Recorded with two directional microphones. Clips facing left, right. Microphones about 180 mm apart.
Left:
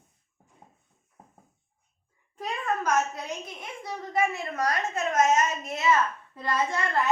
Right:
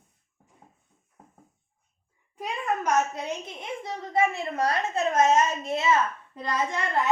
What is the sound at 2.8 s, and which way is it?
A woman's voice, 25° right (ahead or behind).